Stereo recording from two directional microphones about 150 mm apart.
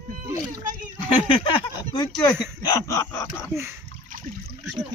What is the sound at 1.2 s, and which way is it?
Speech, 30° left (ahead or behind).